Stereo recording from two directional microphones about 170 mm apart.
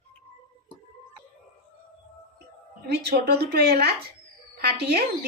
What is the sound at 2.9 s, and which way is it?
Speech, 70° right (ahead or behind).